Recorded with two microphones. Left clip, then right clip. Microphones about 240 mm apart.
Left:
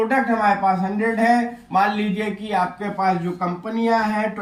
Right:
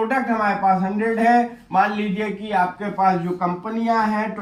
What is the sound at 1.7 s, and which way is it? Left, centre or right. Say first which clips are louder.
A man's voice: left 1 dB; centre.